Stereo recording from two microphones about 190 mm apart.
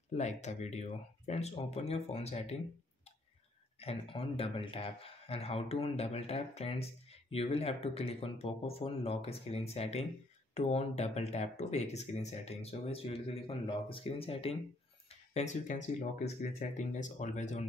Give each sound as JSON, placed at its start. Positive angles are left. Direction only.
{"t": 0.1, "sound": "speech", "side_deg": 35}
{"t": 3.8, "sound": "speech", "side_deg": 30}